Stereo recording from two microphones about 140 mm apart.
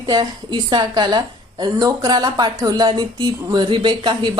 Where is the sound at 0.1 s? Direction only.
30° right (ahead or behind).